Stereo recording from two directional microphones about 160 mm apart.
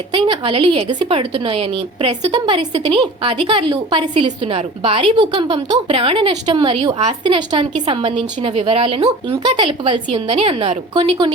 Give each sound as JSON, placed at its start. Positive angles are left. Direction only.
{"t": 0.1, "sound": "a woman's voice", "side_deg": -35}